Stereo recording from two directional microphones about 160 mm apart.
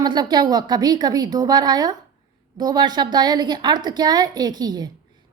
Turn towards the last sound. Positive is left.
turn(degrees=-25)  # may be behind; listen again after turning